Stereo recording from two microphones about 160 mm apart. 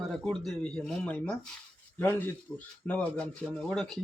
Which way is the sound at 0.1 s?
Centre (ahead or behind).